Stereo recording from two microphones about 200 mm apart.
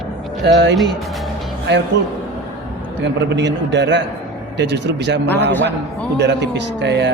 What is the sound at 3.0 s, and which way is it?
A man's voice, 60° right (ahead or behind).